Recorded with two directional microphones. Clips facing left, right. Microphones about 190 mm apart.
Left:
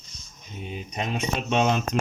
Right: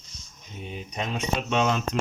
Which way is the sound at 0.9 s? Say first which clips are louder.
Even; 20° left (ahead or behind).